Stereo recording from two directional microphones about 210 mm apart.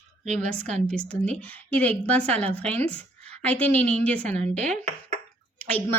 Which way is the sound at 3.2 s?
30° right (ahead or behind).